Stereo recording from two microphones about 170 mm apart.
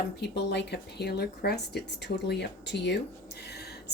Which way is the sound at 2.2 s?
80° left.